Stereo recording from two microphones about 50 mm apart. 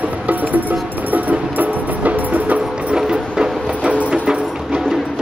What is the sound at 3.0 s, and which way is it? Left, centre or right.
Music, centre.